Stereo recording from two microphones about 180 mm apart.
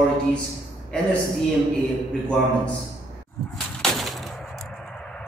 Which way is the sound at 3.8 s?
Centre (ahead or behind).